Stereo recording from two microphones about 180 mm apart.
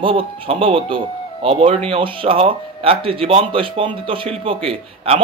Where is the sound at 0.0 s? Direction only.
30° right (ahead or behind).